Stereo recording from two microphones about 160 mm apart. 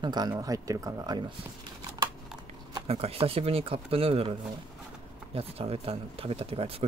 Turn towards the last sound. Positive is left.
turn(degrees=-35)  # may be behind; listen again after turning